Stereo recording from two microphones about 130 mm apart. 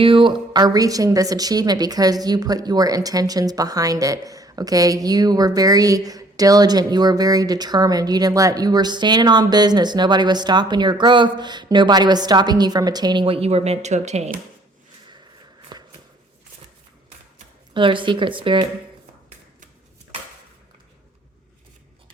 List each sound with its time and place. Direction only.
0.0 s a woman's voice: 40° right (ahead or behind)
13.2 s speech: 50° right (ahead or behind)
15.7 s a sound: 35° right (ahead or behind)
17.7 s a woman's voice: 40° right (ahead or behind)